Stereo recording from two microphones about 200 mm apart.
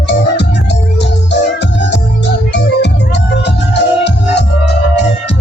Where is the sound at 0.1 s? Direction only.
60° left (ahead or behind).